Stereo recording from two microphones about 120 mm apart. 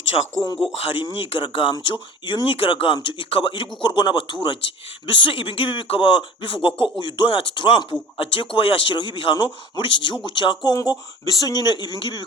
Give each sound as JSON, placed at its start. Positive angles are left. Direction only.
{"t": 0.8, "sound": "speech", "side_deg": 50}